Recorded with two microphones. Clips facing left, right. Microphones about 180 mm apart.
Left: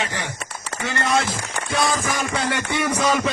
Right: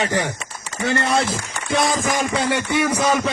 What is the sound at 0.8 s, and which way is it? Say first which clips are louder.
Speech: right 3 dB; 35° right (ahead or behind).